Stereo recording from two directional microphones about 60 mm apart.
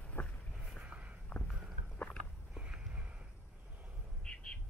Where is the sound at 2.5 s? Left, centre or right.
Centre.